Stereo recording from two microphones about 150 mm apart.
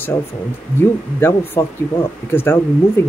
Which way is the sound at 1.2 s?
15° left (ahead or behind).